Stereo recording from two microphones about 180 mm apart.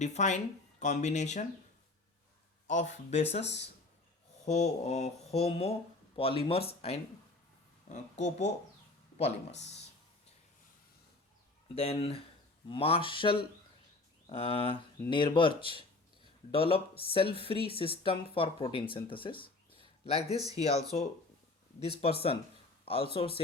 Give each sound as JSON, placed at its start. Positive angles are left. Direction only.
{"t": 0.0, "sound": "speech", "side_deg": 40}
{"t": 2.6, "sound": "speech", "side_deg": 45}
{"t": 11.7, "sound": "speech", "side_deg": 35}
{"t": 20.3, "sound": "speech", "side_deg": -20}
{"t": 21.8, "sound": "speech", "side_deg": 35}